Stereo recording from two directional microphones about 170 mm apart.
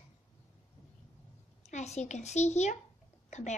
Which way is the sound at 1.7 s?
40° left (ahead or behind).